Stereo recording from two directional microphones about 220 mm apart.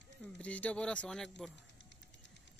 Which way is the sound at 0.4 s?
5° left (ahead or behind).